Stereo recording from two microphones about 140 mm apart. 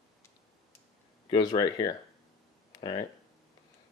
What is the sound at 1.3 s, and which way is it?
Speech, 30° left (ahead or behind).